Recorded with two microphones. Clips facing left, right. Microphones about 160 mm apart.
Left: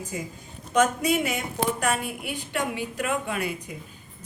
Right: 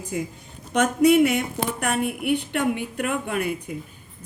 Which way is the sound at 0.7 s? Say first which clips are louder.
Right 5 dB; 65° right (ahead or behind).